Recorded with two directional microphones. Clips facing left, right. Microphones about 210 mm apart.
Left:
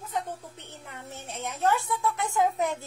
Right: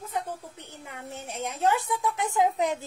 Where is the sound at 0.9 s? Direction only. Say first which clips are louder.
Right 3 dB; 10° right (ahead or behind).